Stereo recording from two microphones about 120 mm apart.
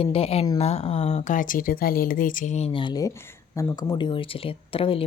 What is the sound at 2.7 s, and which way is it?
Speech, 40° left (ahead or behind).